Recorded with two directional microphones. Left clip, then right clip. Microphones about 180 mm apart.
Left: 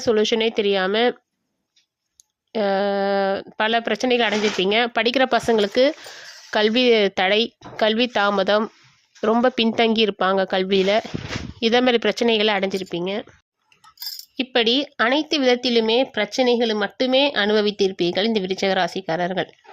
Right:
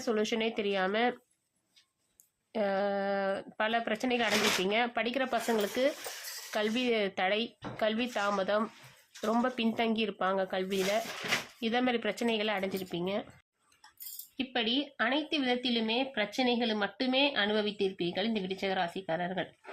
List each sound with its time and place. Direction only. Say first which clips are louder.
0.0 s speech: left 12 dB; 40° left (ahead or behind)
2.5 s speech: left 10 dB; 45° left (ahead or behind)
14.3 s speech: left 12 dB; 60° left (ahead or behind)